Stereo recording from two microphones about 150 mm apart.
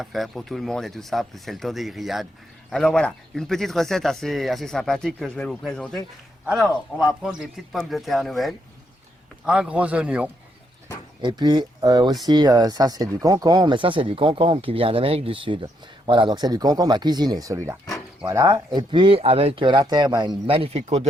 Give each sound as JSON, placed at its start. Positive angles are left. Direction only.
{"t": 0.0, "sound": "a man's voice", "side_deg": 0}
{"t": 11.2, "sound": "speech", "side_deg": -30}